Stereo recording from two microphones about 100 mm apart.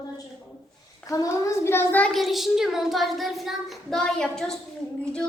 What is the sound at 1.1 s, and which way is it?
A woman's voice, 35° left (ahead or behind).